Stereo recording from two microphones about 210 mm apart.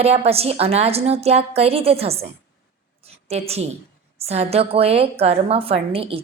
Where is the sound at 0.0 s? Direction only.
30° right (ahead or behind).